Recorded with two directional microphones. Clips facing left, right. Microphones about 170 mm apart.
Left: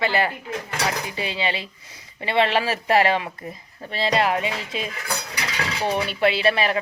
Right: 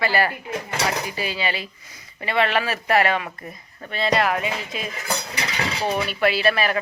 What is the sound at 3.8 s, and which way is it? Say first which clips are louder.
Speech: even; 30° left (ahead or behind).